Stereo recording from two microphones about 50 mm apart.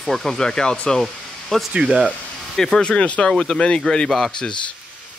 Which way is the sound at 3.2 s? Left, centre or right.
Centre.